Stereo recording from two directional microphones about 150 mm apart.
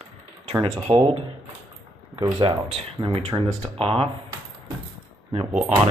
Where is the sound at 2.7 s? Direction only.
35° right (ahead or behind).